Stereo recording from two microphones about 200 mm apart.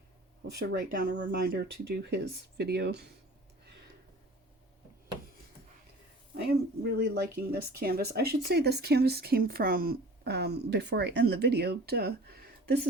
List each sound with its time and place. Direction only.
0.7 s speech: 50° right (ahead or behind)
6.3 s speech: 55° right (ahead or behind)